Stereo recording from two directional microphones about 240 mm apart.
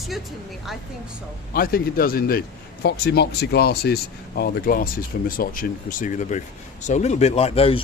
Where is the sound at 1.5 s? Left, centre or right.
Left.